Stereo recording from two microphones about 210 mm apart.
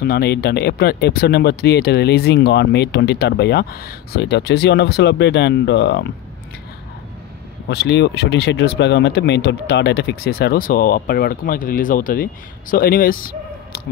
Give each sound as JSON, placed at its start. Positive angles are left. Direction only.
{"t": 0.0, "sound": "speech", "side_deg": 50}
{"t": 7.6, "sound": "speech", "side_deg": 55}